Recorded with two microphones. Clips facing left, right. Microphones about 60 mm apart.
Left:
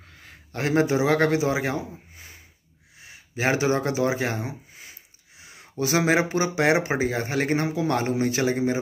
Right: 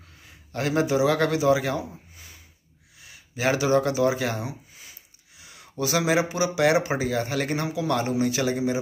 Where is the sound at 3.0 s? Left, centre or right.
Left.